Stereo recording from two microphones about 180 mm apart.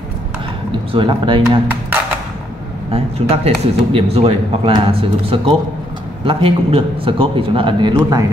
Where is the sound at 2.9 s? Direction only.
35° right (ahead or behind).